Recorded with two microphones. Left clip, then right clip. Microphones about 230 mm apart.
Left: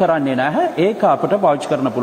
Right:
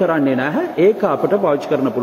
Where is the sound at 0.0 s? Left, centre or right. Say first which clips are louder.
Left 1 dB; left.